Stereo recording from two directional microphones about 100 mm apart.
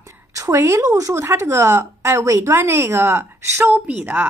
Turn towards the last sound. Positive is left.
turn(degrees=-20)  # may be behind; listen again after turning